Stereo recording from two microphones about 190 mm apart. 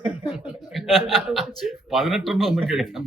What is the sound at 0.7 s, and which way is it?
A man's voice, centre (ahead or behind).